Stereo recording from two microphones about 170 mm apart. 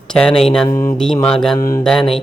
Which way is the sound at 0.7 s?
50° left (ahead or behind).